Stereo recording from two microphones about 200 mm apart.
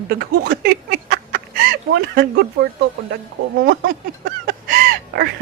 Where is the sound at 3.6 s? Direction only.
45° right (ahead or behind).